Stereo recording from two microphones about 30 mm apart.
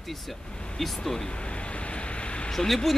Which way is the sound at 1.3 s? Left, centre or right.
Left.